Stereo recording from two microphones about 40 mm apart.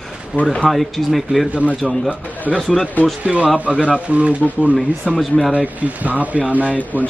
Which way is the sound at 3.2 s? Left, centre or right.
Right.